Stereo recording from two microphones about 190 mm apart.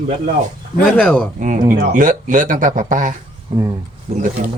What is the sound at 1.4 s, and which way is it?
Speech, 40° right (ahead or behind).